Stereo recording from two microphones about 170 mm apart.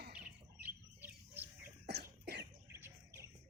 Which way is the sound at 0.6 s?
10° right (ahead or behind).